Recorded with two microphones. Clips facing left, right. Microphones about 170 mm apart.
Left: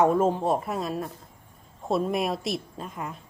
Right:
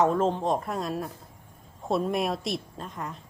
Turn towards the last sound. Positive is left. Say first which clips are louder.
# left 1 dB
turn(degrees=5)  # may be behind; listen again after turning